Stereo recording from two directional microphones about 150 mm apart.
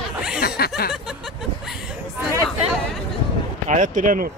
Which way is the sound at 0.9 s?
5° right (ahead or behind).